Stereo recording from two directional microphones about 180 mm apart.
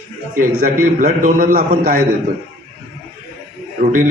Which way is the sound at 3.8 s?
45° right (ahead or behind).